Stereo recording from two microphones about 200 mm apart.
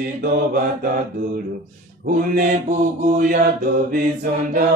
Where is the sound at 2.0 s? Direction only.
45° right (ahead or behind).